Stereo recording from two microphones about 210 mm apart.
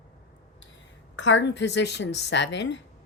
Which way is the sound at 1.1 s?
60° left (ahead or behind).